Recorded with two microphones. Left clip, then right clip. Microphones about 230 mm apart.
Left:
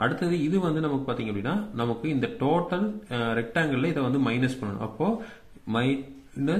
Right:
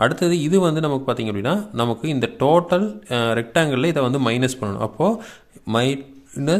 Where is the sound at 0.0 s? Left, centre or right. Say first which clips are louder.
Right 7 dB; right.